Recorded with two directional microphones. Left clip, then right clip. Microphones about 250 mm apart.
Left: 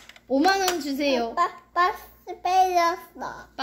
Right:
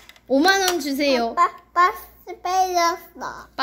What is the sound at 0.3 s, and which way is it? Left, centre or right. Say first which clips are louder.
A woman's voice: right 4 dB; right.